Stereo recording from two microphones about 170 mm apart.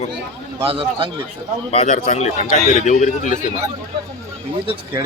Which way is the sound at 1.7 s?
40° left (ahead or behind).